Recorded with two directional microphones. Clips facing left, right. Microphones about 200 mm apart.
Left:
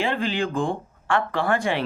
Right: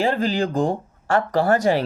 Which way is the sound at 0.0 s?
40° right (ahead or behind).